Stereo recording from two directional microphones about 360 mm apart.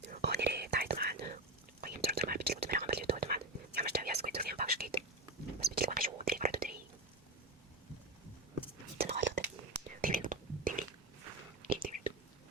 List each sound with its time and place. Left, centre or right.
0.1 s whispering: right
9.0 s whispering: right